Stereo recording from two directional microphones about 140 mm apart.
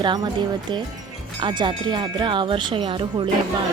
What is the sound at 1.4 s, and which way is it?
Music, 35° right (ahead or behind).